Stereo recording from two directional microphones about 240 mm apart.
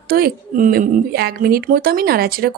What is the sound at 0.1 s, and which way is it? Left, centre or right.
Speech, right.